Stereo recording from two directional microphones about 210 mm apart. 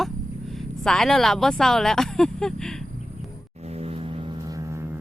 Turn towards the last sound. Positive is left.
turn(degrees=-25)  # may be behind; listen again after turning